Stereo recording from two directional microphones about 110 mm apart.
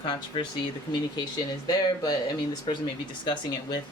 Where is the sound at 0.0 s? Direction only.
50° left (ahead or behind).